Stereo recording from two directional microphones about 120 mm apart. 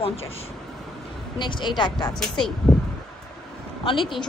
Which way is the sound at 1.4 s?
40° left (ahead or behind).